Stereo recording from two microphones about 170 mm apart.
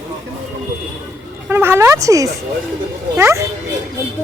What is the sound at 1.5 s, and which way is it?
Speech, 15° right (ahead or behind).